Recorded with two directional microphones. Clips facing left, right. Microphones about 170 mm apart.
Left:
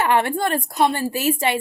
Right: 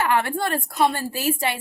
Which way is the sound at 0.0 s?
25° left (ahead or behind).